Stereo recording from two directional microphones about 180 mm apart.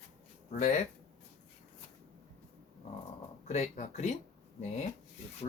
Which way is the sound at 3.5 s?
40° left (ahead or behind).